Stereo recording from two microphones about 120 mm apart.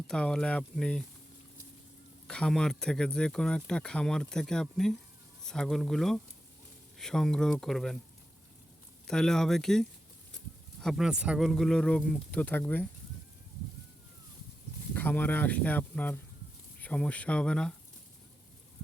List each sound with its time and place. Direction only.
0.1 s speech: 5° left (ahead or behind)
2.2 s speech: 5° left (ahead or behind)
9.0 s speech: 5° left (ahead or behind)
11.4 s speech: 5° left (ahead or behind)
14.9 s speech: 15° left (ahead or behind)